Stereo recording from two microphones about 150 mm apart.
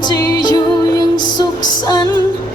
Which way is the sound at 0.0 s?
25° left (ahead or behind).